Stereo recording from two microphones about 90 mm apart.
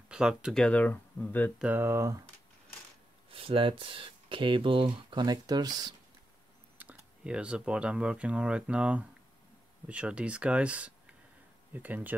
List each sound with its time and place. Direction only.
0.1 s speech: 10° right (ahead or behind)
0.6 s speech: 15° left (ahead or behind)
1.8 s speech: 30° right (ahead or behind)
3.3 s speech: 90° right; by 5.2 s 70° right (ahead or behind)
5.2 s speech: 50° right (ahead or behind)
6.8 s speech: 15° right (ahead or behind)